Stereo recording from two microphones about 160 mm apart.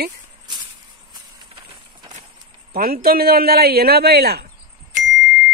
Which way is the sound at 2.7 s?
70° right (ahead or behind).